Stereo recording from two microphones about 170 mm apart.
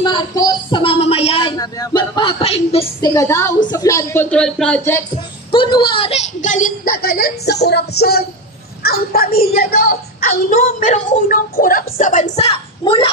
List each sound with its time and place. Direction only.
0.0 s a sound: 25° left (ahead or behind)
3.0 s a woman's voice: 20° left (ahead or behind)
5.5 s a woman's voice: 30° left (ahead or behind)